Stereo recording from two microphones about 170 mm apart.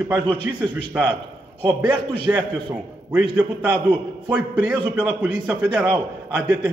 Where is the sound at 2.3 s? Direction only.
10° right (ahead or behind).